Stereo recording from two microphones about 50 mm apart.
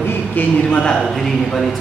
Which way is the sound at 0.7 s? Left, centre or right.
Centre.